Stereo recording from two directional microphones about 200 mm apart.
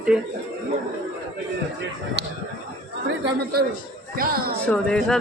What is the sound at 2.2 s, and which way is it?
Speech, 60° right (ahead or behind).